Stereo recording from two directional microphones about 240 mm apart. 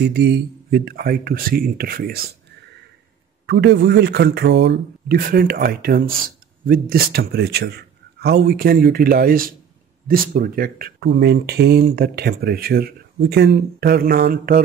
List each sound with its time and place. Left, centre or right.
0.0 s speech: right
3.4 s speech: right